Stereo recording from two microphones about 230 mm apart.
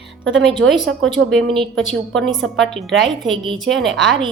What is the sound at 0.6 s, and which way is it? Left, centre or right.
Speech, right.